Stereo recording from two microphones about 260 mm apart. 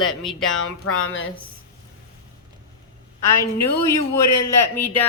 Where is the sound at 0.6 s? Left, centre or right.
Left.